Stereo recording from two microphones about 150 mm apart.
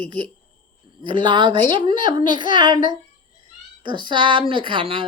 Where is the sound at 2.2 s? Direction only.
65° left (ahead or behind).